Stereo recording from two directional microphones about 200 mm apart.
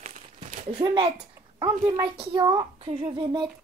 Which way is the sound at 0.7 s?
20° right (ahead or behind).